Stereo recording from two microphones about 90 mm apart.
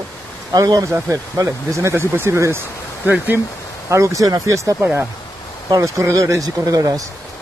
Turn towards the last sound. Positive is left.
turn(degrees=-45)  # may be behind; listen again after turning